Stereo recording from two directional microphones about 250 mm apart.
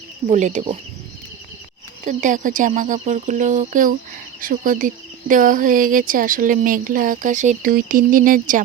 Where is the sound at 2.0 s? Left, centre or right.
Right.